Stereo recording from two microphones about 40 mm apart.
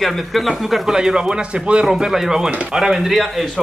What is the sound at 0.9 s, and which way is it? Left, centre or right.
Speech, centre.